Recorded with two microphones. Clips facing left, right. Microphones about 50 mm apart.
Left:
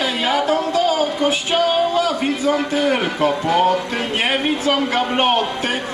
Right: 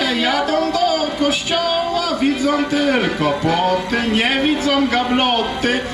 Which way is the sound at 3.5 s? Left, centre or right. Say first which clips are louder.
Left 1 dB; left.